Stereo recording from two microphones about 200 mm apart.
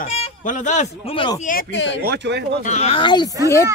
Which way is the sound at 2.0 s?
60° right (ahead or behind).